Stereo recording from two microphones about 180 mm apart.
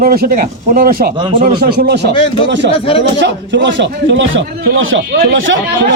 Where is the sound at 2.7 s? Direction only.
30° left (ahead or behind).